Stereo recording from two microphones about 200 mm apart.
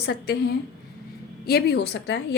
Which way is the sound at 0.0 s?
55° left (ahead or behind).